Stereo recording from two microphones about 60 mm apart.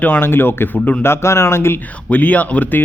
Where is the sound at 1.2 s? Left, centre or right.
Left.